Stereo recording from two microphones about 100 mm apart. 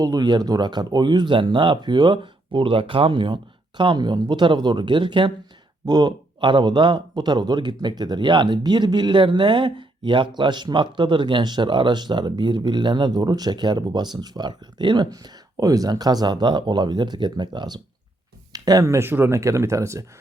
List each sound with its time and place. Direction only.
0.0 s speech: 40° right (ahead or behind)